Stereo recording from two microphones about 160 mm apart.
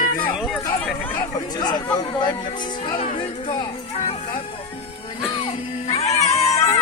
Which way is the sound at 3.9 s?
35° left (ahead or behind).